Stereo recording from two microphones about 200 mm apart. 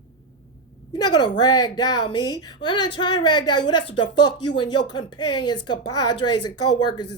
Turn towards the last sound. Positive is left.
turn(degrees=20)  # may be behind; listen again after turning